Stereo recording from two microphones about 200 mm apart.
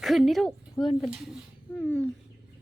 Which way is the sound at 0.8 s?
20° left (ahead or behind).